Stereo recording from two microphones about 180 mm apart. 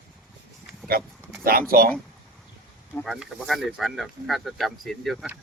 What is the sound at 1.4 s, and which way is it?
Speech, 55° right (ahead or behind).